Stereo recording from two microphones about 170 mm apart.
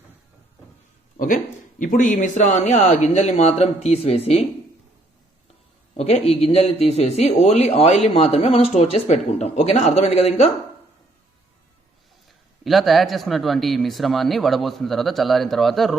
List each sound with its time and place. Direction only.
1.1 s a sound: 50° left (ahead or behind)
1.8 s speech: 50° left (ahead or behind)
6.0 s speech: 35° left (ahead or behind)
12.6 s speech: centre (ahead or behind)